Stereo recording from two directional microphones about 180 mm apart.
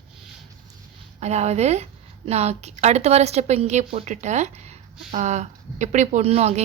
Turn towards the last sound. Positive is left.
turn(degrees=-35)  # may be behind; listen again after turning